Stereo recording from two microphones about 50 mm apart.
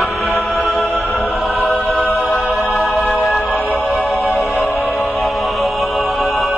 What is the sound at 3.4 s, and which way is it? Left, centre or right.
Music, left.